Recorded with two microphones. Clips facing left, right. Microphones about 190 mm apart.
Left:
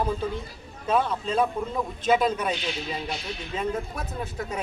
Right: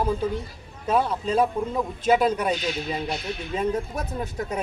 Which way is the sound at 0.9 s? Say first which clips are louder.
Right 2 dB; 10° right (ahead or behind).